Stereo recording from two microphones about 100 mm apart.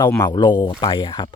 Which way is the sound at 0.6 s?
40° left (ahead or behind).